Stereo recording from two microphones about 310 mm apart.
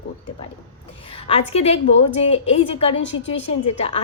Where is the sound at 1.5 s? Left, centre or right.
Centre.